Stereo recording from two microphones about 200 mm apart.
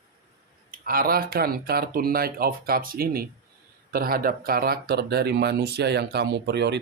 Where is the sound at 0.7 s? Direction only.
45° right (ahead or behind).